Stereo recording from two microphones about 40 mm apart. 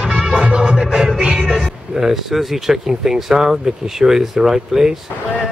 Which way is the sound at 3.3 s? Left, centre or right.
Centre.